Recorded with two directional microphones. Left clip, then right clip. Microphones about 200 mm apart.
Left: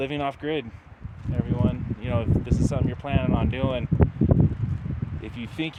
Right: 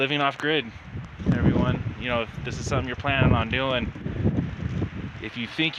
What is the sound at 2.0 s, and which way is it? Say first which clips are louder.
Speech: right 2 dB; 5° left (ahead or behind).